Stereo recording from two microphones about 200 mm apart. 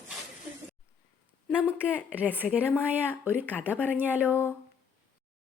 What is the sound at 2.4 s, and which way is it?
Speech, centre (ahead or behind).